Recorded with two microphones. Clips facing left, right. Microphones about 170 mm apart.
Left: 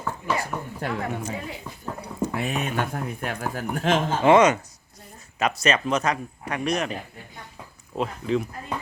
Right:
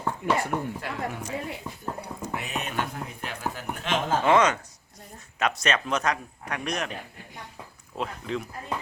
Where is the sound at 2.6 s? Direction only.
50° left (ahead or behind).